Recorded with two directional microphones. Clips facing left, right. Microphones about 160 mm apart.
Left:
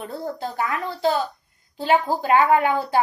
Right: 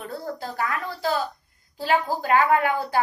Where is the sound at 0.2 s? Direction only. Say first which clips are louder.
Left 3 dB; 20° left (ahead or behind).